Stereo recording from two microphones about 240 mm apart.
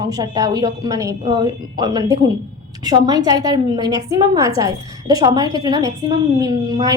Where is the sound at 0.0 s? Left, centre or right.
Centre.